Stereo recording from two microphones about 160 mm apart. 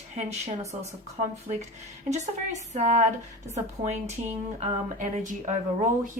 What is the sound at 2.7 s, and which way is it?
Speech, 45° right (ahead or behind).